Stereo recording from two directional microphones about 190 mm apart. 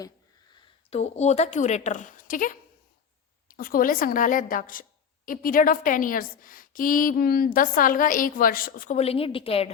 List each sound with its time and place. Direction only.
0.9 s a woman's voice: 35° left (ahead or behind)
9.0 s a woman's voice: 30° left (ahead or behind)